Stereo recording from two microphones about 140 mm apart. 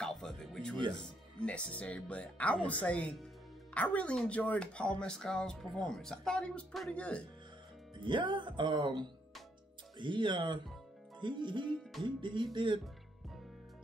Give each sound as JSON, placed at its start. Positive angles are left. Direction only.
{"t": 0.0, "sound": "music", "side_deg": 5}
{"t": 1.4, "sound": "speech", "side_deg": 10}
{"t": 8.0, "sound": "speech", "side_deg": -35}